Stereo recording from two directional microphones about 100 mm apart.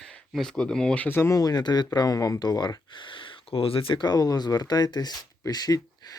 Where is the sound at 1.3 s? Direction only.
40° left (ahead or behind).